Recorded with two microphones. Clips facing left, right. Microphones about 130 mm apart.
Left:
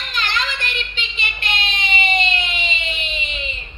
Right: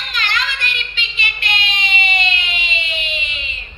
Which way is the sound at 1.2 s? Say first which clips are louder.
Right 1 dB; 40° left (ahead or behind).